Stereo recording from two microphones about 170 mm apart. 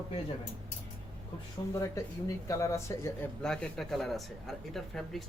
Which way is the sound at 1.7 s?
20° left (ahead or behind).